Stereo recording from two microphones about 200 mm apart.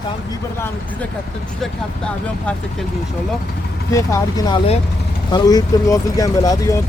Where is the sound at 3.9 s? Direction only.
15° left (ahead or behind).